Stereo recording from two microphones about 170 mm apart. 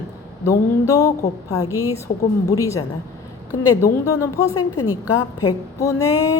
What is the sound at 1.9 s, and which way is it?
Speech, 20° left (ahead or behind).